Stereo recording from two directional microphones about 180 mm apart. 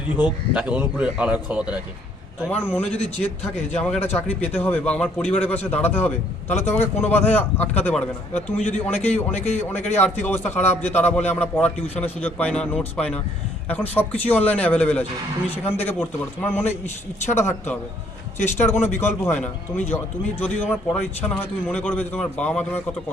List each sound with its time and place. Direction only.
0.2 s speech: 10° right (ahead or behind)
2.5 s speech: 10° left (ahead or behind)
8.5 s a man's voice: 35° left (ahead or behind)
9.2 s speech: 10° left (ahead or behind)